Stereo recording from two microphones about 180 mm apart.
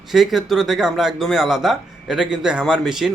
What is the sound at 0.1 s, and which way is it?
Speech, centre (ahead or behind).